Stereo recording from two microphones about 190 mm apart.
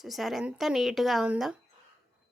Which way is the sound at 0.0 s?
Centre (ahead or behind).